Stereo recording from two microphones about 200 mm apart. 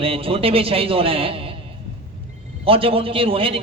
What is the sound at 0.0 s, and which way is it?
A man's voice, 30° right (ahead or behind).